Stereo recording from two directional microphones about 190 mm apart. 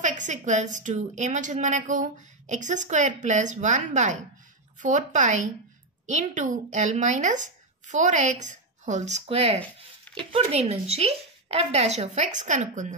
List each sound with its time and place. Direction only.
0.0 s a woman's voice: 40° right (ahead or behind)